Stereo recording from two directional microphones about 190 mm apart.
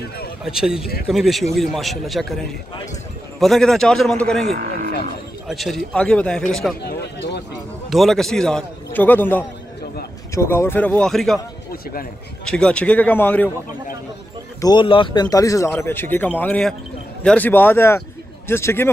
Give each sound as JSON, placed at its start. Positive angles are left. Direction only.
{"t": 0.4, "sound": "a man's voice", "side_deg": -5}
{"t": 3.3, "sound": "a man's voice", "side_deg": 0}
{"t": 4.5, "sound": "speech", "side_deg": -50}
{"t": 5.5, "sound": "a man's voice", "side_deg": 0}
{"t": 6.8, "sound": "a sound", "side_deg": 60}
{"t": 7.9, "sound": "a man's voice", "side_deg": 0}
{"t": 11.7, "sound": "speech", "side_deg": 50}
{"t": 12.4, "sound": "speech", "side_deg": 5}
{"t": 14.6, "sound": "speech", "side_deg": 25}